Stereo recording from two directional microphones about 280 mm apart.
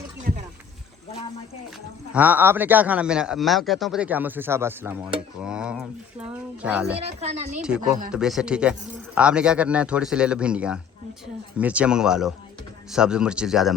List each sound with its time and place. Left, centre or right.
2.1 s a man's voice: centre
7.2 s a woman's voice: right
8.1 s a man's voice: centre